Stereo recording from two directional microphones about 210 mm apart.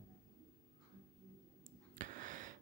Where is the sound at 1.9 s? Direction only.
40° right (ahead or behind).